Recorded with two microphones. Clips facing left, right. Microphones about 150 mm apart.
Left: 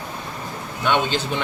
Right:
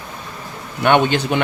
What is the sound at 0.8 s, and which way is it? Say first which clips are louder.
Speech: right 6 dB; 65° right (ahead or behind).